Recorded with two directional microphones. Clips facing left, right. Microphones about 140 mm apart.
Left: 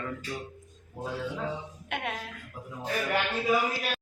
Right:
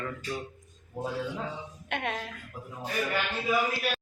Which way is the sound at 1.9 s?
5° left (ahead or behind).